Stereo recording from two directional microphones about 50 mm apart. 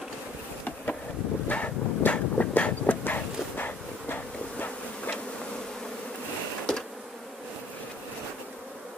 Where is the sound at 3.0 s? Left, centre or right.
Left.